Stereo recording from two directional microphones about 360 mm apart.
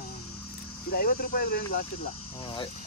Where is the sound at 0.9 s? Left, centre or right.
Left.